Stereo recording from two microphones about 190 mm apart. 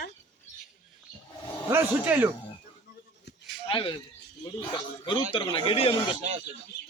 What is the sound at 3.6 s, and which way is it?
Speech, 25° left (ahead or behind).